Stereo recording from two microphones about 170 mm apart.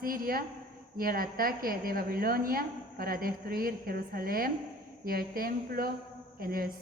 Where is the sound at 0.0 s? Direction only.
55° right (ahead or behind).